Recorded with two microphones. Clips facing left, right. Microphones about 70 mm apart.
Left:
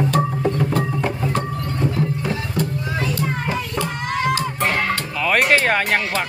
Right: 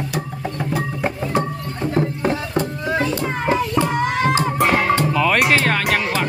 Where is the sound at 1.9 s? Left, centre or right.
Right.